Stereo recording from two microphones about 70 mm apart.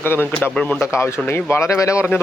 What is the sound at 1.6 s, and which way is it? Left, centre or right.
Speech, left.